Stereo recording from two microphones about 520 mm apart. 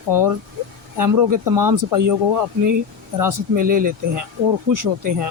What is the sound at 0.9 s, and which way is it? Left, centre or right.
Speech, right.